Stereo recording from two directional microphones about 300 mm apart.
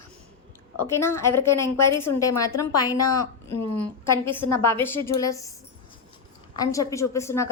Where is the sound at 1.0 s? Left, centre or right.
Centre.